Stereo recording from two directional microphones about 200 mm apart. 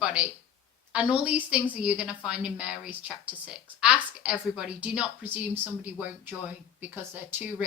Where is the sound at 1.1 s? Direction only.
5° right (ahead or behind).